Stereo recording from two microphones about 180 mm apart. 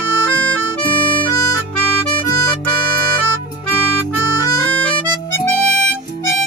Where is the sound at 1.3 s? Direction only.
20° left (ahead or behind).